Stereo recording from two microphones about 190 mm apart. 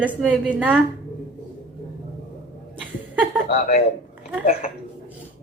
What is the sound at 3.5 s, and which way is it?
Speech, 50° left (ahead or behind).